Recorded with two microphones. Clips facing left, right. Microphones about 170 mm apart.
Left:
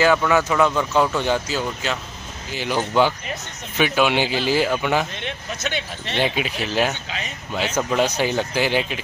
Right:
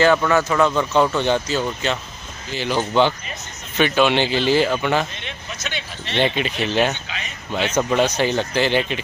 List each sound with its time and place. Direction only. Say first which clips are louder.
0.0 s speech: right 1 dB; 5° left (ahead or behind)
5.2 s speech: left 4 dB; 50° left (ahead or behind)
6.1 s speech: right 2 dB; 5° left (ahead or behind)